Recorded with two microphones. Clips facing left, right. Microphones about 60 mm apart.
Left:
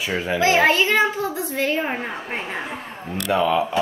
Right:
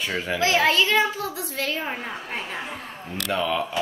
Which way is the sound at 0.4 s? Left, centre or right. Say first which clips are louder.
Left 3 dB; left.